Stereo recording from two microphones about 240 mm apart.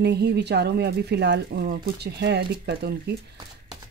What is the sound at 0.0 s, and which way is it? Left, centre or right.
Speech, right.